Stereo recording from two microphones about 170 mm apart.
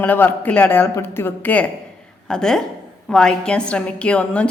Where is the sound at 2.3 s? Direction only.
5° left (ahead or behind).